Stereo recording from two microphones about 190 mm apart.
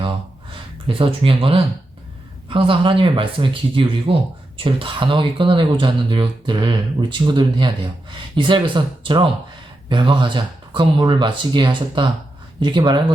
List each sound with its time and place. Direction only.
0.9 s speech: 30° right (ahead or behind)